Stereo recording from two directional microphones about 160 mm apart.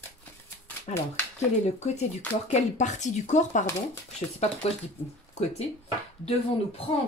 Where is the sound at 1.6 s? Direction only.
45° left (ahead or behind).